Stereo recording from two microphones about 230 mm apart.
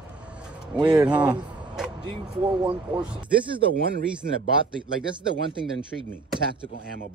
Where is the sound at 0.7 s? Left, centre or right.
Centre.